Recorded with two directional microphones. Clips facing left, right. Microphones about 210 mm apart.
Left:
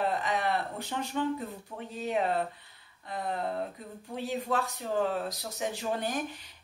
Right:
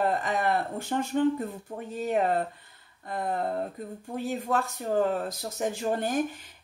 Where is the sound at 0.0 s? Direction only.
45° right (ahead or behind).